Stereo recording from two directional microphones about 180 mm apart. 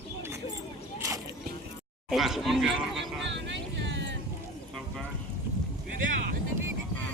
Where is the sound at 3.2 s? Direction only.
85° right.